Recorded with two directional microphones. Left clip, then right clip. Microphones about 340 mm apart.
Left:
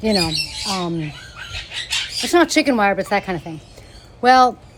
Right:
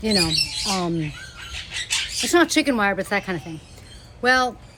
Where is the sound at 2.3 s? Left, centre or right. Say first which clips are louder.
Left 3 dB; centre.